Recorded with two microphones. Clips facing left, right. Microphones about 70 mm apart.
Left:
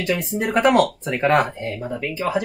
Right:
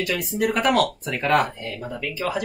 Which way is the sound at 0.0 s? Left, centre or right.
Left.